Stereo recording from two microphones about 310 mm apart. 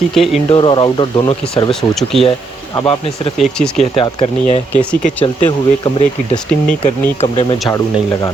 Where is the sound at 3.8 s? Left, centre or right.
Centre.